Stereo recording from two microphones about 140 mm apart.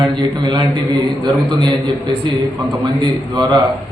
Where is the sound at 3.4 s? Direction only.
30° right (ahead or behind).